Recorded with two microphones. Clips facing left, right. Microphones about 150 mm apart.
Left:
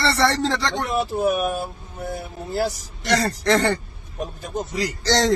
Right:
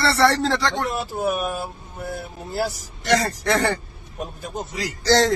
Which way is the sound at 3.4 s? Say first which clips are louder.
Left 2 dB; 10° right (ahead or behind).